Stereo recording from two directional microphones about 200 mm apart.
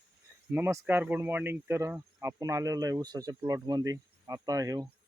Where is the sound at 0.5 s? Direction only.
10° right (ahead or behind).